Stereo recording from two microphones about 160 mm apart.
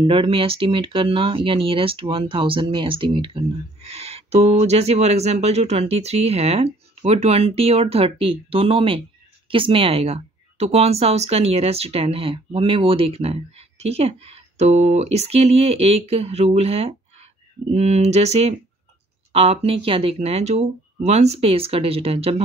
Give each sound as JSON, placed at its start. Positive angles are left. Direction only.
{"t": 0.0, "sound": "speech", "side_deg": -35}